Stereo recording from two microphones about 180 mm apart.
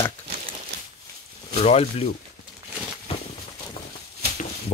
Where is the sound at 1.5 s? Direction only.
35° left (ahead or behind).